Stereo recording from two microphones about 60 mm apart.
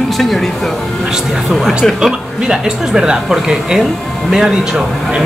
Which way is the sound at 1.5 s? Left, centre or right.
Centre.